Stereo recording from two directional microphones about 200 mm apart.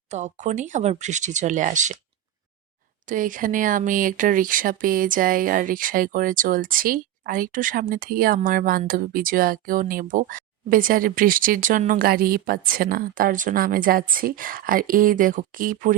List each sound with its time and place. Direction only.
0.1 s speech: 35° right (ahead or behind)
3.1 s speech: 40° right (ahead or behind)